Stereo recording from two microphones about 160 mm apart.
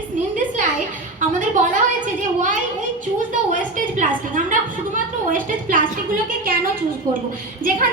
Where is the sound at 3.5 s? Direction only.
55° right (ahead or behind).